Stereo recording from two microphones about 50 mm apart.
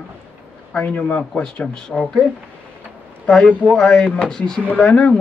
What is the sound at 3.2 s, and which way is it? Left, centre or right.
Speech, left.